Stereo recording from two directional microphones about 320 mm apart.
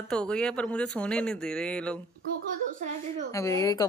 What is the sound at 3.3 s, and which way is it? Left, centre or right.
Speech, centre.